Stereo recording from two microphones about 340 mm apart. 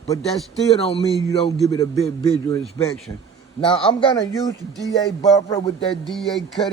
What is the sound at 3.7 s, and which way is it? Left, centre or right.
Speech, centre.